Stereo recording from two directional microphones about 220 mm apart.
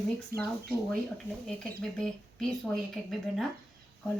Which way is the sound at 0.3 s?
45° right (ahead or behind).